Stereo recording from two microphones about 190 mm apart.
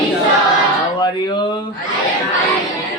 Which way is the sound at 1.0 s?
25° left (ahead or behind).